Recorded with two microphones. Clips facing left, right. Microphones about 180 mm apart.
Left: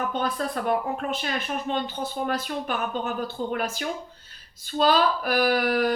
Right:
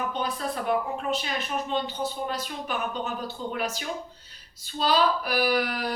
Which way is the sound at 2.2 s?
55° left (ahead or behind).